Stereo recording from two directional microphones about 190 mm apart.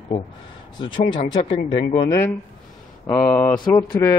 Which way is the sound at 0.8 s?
25° left (ahead or behind).